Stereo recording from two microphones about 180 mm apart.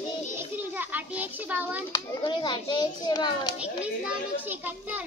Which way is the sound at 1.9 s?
25° left (ahead or behind).